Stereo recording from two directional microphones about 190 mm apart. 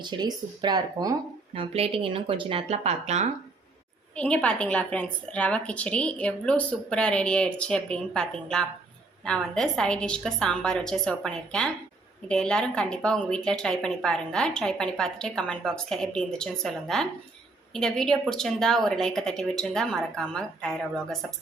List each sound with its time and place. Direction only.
0.0 s speech: 25° right (ahead or behind)
4.1 s speech: 5° left (ahead or behind)